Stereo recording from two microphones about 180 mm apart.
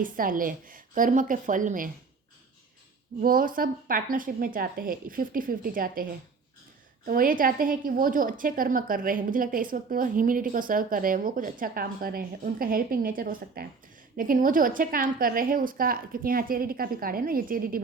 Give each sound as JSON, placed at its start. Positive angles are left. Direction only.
{"t": 0.0, "sound": "a woman's voice", "side_deg": -50}
{"t": 3.2, "sound": "a woman's voice", "side_deg": -50}